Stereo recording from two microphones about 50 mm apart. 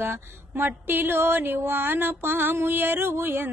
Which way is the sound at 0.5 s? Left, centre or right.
Right.